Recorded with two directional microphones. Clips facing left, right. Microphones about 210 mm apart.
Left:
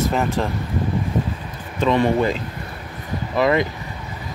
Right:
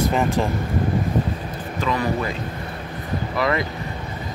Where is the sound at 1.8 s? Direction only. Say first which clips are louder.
Left 6 dB; 25° left (ahead or behind).